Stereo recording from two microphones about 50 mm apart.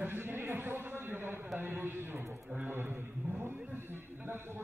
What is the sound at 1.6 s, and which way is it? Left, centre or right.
Speech, right.